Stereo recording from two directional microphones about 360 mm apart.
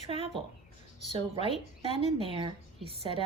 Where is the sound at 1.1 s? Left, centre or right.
Centre.